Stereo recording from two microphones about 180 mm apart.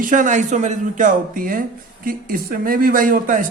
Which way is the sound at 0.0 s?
45° right (ahead or behind).